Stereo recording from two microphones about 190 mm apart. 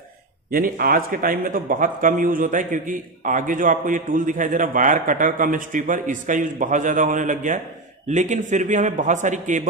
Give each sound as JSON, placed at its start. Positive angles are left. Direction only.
{"t": 0.5, "sound": "a man's voice", "side_deg": -50}